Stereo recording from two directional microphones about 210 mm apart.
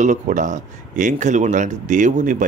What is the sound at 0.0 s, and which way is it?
Speech, 35° right (ahead or behind).